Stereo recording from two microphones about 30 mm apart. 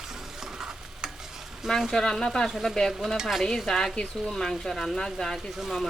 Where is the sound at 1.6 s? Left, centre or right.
Centre.